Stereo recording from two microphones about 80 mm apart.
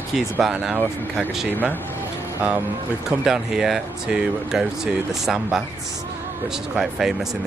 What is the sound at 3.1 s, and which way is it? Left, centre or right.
Speech, centre.